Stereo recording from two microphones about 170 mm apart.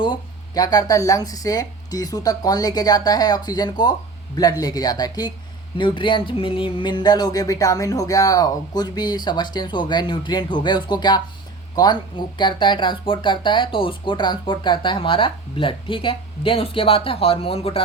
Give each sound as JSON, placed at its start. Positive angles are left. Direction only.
{"t": 0.0, "sound": "speech", "side_deg": 25}